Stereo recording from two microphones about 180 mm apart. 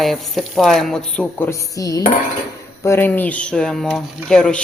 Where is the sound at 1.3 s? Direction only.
15° left (ahead or behind).